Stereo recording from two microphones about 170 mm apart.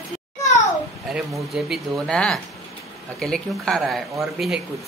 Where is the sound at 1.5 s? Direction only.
Centre (ahead or behind).